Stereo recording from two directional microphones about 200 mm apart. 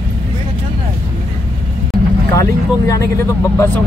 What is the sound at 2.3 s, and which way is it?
Speech, 15° left (ahead or behind).